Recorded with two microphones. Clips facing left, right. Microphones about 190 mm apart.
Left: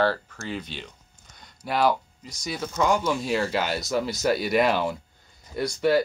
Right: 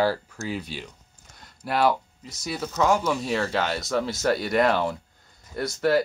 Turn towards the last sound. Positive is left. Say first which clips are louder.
# even
turn(degrees=0)  # may be behind; listen again after turning